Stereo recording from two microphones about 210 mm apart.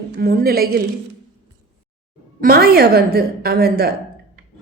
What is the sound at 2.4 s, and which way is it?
A woman's voice, 45° right (ahead or behind).